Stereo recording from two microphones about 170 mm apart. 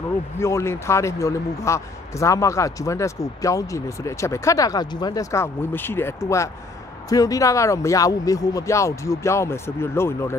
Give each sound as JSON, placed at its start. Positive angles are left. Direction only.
{"t": 0.4, "sound": "speech", "side_deg": 15}